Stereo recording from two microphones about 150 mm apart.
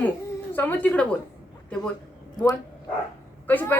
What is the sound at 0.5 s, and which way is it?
Speech, 10° left (ahead or behind).